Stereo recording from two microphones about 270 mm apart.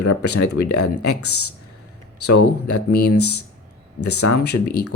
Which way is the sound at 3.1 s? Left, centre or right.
Left.